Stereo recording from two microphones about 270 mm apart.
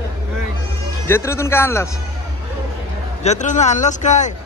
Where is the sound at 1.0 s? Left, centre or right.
Centre.